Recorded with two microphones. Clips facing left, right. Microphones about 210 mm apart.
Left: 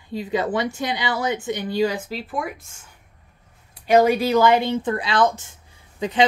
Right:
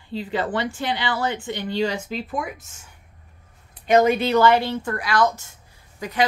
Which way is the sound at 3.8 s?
10° left (ahead or behind).